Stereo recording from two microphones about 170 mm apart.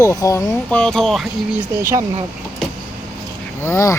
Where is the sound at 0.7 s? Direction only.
5° left (ahead or behind).